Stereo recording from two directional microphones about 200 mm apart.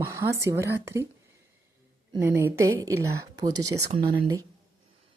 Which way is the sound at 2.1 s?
15° right (ahead or behind).